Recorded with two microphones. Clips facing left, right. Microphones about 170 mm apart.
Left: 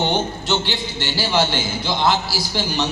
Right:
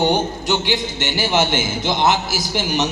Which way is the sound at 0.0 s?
10° right (ahead or behind).